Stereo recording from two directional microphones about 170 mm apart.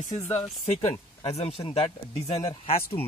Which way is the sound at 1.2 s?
35° left (ahead or behind).